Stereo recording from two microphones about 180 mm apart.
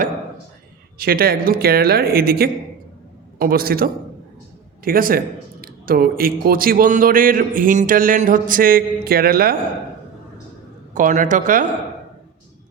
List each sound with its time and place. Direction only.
0.9 s speech: 55° right (ahead or behind)
10.9 s speech: 45° right (ahead or behind)